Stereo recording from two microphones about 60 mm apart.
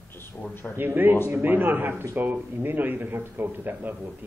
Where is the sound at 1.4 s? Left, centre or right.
Right.